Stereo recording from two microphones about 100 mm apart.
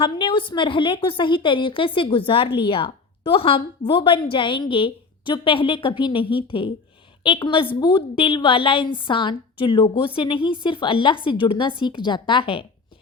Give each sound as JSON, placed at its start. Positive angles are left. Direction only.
{"t": 0.0, "sound": "a woman's voice", "side_deg": 55}